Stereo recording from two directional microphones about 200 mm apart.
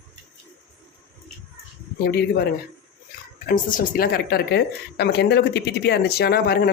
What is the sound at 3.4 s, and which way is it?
Speech, 45° left (ahead or behind).